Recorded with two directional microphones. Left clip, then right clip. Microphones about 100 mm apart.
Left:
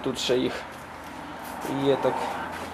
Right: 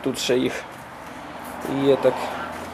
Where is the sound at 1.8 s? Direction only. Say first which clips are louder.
Right 5 dB; 30° right (ahead or behind).